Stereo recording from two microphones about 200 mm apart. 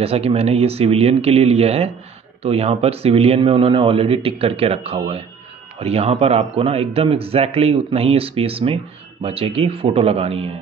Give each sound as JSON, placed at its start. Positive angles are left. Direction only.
{"t": 0.0, "sound": "speech", "side_deg": -30}